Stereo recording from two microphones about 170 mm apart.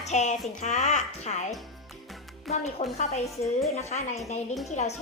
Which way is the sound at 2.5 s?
Centre (ahead or behind).